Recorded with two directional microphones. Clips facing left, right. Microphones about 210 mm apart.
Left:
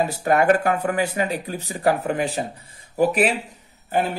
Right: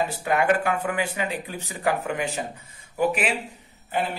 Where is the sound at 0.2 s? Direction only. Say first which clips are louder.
Left 5 dB; 40° left (ahead or behind).